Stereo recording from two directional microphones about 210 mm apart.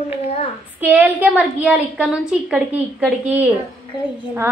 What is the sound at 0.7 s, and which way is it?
A woman's voice, 10° right (ahead or behind).